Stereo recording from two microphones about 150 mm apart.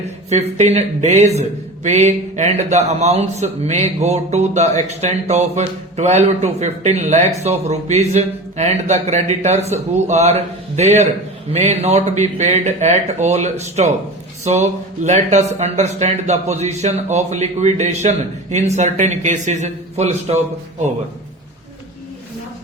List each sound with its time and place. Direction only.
0.3 s speech: 50° right (ahead or behind)